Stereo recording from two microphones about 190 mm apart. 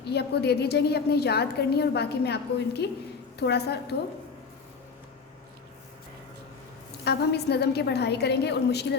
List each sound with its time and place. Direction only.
0.0 s a woman's voice: 60° left (ahead or behind)
7.0 s a woman's voice: 60° left (ahead or behind)